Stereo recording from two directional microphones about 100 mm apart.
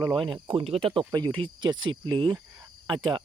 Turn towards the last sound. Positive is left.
turn(degrees=-50)  # may be behind; listen again after turning